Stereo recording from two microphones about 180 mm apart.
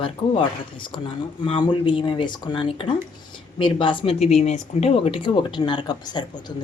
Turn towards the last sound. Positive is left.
turn(degrees=25)  # may be behind; listen again after turning